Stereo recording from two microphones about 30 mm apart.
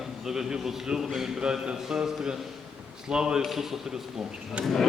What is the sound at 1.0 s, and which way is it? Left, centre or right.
Speech, centre.